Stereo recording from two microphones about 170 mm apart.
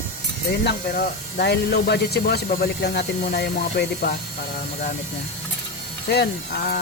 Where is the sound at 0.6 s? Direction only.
65° left (ahead or behind).